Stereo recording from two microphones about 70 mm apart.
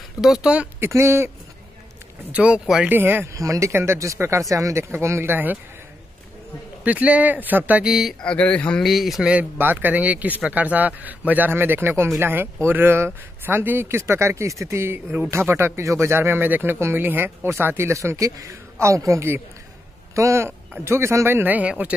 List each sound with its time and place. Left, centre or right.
0.2 s speech: centre
0.7 s speech: right
2.3 s speech: centre
2.9 s a man's voice: right
3.3 s speech: right
3.7 s speech: right
6.8 s a man's voice: centre
7.8 s speech: centre
8.2 s speech: centre
8.8 s speech: centre
9.3 s a man's voice: right